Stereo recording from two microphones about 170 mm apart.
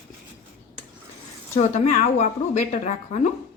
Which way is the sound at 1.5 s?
40° left (ahead or behind).